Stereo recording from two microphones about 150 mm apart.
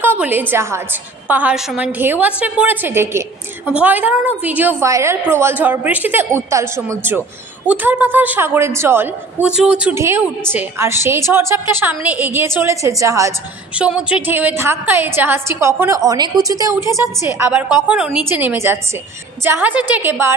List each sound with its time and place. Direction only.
0.0 s a woman's voice: 15° right (ahead or behind)
13.7 s a woman's voice: 5° right (ahead or behind)